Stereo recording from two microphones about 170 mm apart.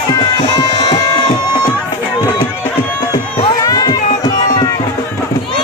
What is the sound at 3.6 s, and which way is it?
Run, 25° left (ahead or behind).